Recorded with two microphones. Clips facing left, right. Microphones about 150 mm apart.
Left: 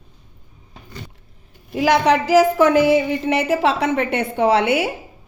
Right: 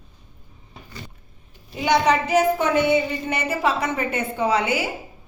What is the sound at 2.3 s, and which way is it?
Music, 85° left.